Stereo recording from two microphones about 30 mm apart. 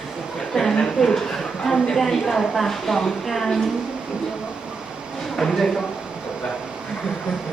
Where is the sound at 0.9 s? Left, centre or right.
Centre.